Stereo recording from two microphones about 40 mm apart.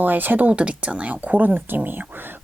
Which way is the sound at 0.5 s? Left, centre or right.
Right.